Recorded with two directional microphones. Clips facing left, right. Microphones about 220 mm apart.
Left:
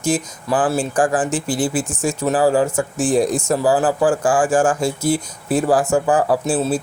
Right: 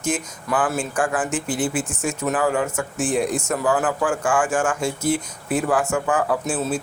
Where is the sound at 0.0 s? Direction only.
30° left (ahead or behind).